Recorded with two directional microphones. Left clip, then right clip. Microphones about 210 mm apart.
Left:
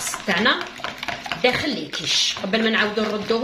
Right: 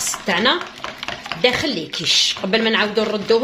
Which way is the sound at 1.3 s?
5° right (ahead or behind).